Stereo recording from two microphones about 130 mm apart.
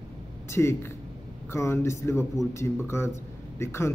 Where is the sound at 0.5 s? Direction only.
20° left (ahead or behind).